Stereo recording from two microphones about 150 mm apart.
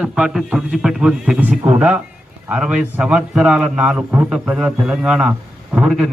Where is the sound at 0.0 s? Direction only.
5° right (ahead or behind).